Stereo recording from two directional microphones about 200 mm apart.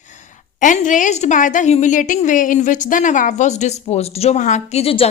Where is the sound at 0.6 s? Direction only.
40° left (ahead or behind).